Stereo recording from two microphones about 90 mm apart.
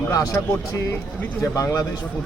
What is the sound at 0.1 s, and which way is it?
A man's voice, 40° left (ahead or behind).